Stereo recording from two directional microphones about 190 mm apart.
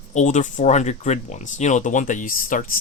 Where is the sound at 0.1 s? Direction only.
40° left (ahead or behind).